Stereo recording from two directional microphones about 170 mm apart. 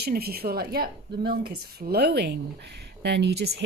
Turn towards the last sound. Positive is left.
turn(degrees=-80)